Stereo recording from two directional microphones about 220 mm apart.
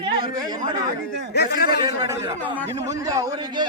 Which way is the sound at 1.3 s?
45° left (ahead or behind).